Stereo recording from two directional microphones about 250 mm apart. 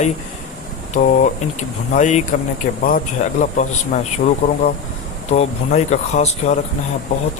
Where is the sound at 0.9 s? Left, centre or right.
Left.